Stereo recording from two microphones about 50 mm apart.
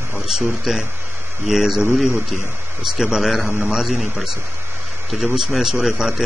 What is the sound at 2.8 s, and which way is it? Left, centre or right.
A man's voice, centre.